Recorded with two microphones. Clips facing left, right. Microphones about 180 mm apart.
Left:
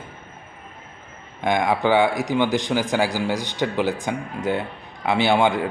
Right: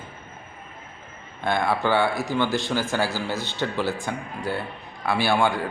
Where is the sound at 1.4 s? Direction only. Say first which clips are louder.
Left 3 dB; 15° left (ahead or behind).